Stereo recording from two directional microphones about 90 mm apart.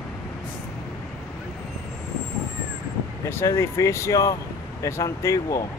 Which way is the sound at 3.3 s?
30° left (ahead or behind).